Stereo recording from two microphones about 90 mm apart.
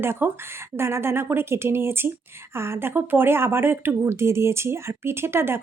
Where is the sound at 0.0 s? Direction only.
25° right (ahead or behind).